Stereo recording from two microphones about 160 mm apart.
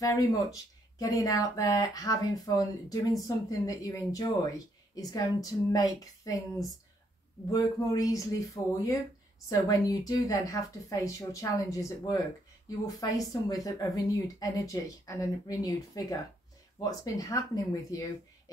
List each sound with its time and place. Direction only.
0.0 s speech: 20° left (ahead or behind)
7.5 s speech: 20° left (ahead or behind)